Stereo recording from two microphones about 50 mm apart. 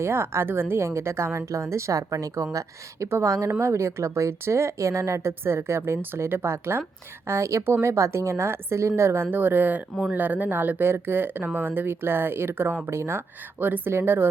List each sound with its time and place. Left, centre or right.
0.0 s a woman's voice: right
3.6 s a woman's voice: right
7.3 s a woman's voice: right
9.3 s speech: right